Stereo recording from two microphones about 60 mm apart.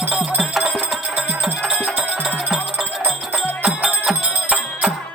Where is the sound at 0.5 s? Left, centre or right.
Centre.